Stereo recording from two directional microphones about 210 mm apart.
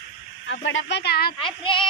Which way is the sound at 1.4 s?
25° left (ahead or behind).